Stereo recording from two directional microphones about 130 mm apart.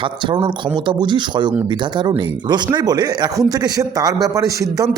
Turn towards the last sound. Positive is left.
turn(degrees=-25)  # may be behind; listen again after turning